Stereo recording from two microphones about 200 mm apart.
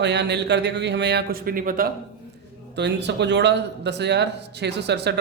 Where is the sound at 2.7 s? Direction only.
60° right (ahead or behind).